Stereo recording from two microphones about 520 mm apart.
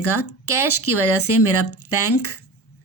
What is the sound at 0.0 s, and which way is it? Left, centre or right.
A woman's voice, left.